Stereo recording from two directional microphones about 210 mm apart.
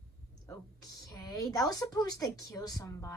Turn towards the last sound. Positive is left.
turn(degrees=15)  # may be behind; listen again after turning